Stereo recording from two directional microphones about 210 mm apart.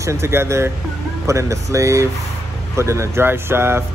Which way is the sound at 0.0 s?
15° right (ahead or behind).